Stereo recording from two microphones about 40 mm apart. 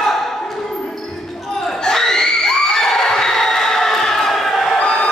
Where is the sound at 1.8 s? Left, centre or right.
Centre.